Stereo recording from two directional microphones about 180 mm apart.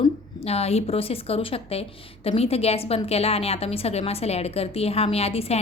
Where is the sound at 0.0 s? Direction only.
35° left (ahead or behind).